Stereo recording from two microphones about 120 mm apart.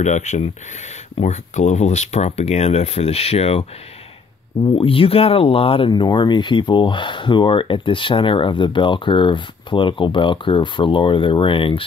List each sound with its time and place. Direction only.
0.0 s speech: 80° left; by 3.6 s 55° left (ahead or behind)
4.7 s speech: 50° left (ahead or behind)
5.9 s speech: 35° left (ahead or behind)